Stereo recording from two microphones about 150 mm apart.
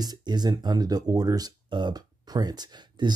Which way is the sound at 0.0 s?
25° right (ahead or behind).